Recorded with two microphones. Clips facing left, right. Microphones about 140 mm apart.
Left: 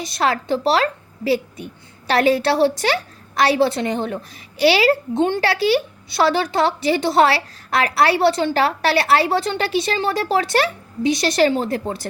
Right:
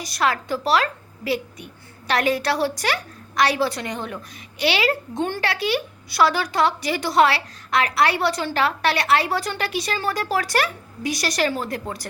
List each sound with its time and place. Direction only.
0.0 s a woman's voice: 25° left (ahead or behind)